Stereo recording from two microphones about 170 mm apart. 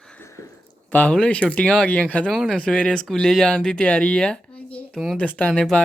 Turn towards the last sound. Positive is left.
turn(degrees=5)  # may be behind; listen again after turning